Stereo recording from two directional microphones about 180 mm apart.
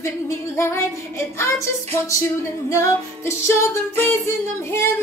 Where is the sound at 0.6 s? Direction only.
15° left (ahead or behind).